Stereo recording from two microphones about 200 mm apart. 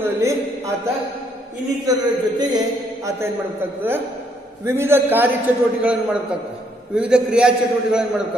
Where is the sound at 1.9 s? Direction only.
20° right (ahead or behind).